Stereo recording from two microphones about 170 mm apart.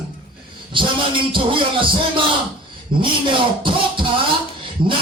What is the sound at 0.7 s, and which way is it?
Speech, 30° right (ahead or behind).